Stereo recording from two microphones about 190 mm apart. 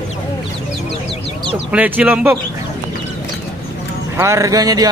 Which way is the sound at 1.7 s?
10° right (ahead or behind).